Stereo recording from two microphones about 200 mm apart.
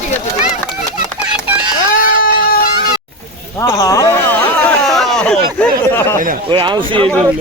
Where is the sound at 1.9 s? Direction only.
45° left (ahead or behind).